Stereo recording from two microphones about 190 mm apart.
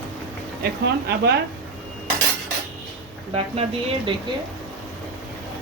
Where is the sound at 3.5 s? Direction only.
30° right (ahead or behind).